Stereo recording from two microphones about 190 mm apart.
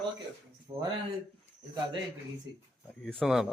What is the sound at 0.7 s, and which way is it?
Speech, 30° right (ahead or behind).